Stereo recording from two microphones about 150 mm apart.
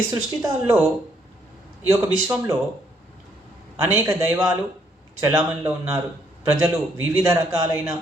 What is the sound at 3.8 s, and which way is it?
Speech, 15° right (ahead or behind).